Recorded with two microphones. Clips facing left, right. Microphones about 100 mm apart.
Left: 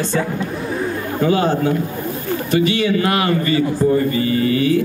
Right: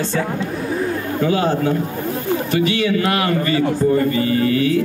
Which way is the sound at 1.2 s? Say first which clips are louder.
Left 2 dB; 30° left (ahead or behind).